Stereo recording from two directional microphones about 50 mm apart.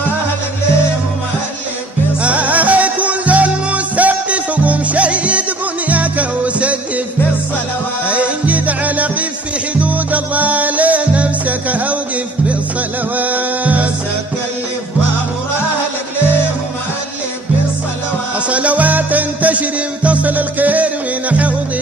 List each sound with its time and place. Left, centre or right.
2.2 s music: right
8.1 s music: right
13.1 s music: right
18.5 s music: right